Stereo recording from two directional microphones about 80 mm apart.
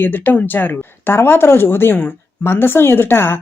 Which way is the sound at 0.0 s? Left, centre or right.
Left.